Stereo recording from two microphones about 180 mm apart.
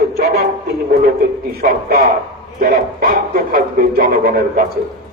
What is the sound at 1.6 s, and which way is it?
Speech, 55° right (ahead or behind).